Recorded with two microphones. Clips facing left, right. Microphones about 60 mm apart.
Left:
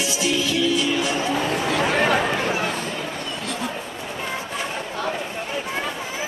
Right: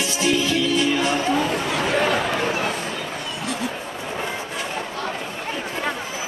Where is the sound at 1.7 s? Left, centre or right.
Centre.